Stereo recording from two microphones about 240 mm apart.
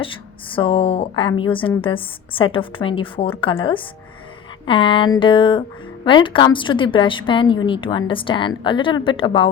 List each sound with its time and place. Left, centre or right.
0.0 s a woman's voice: left